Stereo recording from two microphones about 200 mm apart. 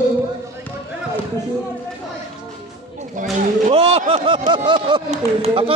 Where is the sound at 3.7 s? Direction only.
30° right (ahead or behind).